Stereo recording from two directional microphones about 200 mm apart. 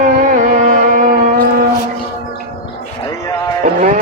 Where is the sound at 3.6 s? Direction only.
40° right (ahead or behind).